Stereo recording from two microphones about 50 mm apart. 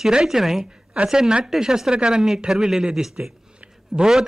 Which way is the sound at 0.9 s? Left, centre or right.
Right.